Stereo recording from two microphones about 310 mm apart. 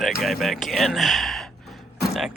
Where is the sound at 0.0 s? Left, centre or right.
Centre.